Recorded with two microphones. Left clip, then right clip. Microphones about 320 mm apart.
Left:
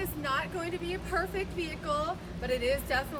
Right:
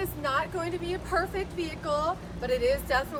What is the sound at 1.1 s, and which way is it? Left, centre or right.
A woman's voice, centre.